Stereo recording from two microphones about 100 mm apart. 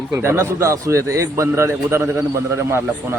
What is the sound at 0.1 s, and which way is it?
A man's voice, 25° right (ahead or behind).